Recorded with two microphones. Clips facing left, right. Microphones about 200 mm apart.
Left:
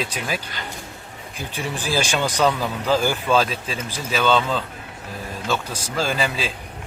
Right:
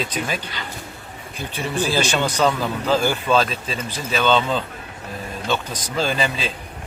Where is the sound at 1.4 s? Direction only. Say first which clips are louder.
Right 5 dB; 15° left (ahead or behind).